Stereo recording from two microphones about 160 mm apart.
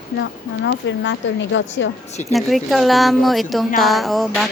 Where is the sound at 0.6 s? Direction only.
90° left.